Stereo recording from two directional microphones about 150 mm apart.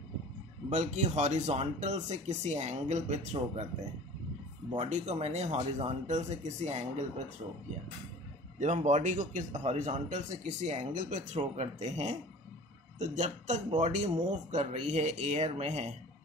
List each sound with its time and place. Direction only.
0.7 s a man's voice: 50° right (ahead or behind)
4.8 s a man's voice: 50° right (ahead or behind)
8.5 s a man's voice: 50° right (ahead or behind)